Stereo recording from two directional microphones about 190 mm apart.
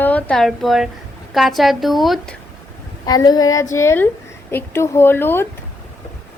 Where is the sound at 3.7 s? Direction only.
15° left (ahead or behind).